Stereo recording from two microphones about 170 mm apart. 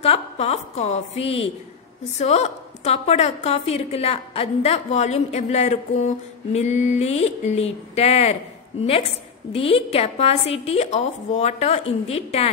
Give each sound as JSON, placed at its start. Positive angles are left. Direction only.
{"t": 0.0, "sound": "a woman's voice", "side_deg": 40}
{"t": 9.5, "sound": "a woman's voice", "side_deg": 35}